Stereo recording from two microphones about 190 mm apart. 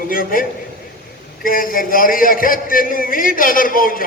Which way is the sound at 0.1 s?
50° left (ahead or behind).